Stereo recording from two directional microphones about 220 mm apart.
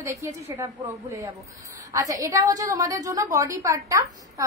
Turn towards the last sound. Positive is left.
turn(degrees=-15)  # may be behind; listen again after turning